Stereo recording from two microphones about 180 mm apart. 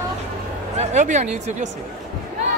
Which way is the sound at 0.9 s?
45° right (ahead or behind).